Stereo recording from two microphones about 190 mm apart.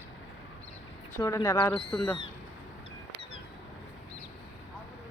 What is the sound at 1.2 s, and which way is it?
Speech, 15° left (ahead or behind).